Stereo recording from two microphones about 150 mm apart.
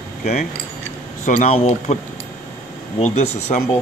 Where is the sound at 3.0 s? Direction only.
50° left (ahead or behind).